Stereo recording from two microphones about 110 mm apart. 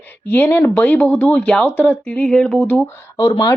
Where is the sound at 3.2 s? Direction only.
35° left (ahead or behind).